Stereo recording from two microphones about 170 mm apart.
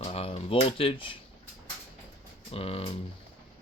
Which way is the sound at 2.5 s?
35° left (ahead or behind).